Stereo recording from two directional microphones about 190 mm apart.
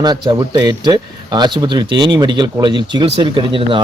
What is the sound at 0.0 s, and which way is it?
Speech, 20° right (ahead or behind).